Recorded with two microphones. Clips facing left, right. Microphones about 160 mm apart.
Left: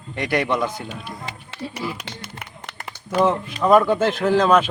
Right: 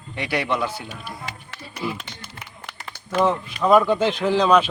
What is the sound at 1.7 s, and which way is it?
Speech, 70° left (ahead or behind).